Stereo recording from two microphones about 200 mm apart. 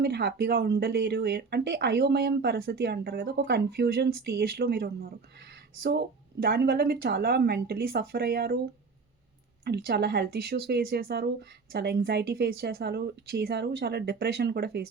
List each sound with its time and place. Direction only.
0.0 s speech: 55° right (ahead or behind)